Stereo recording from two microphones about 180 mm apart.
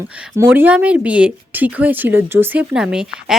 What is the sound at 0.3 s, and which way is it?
A woman's voice, 10° right (ahead or behind).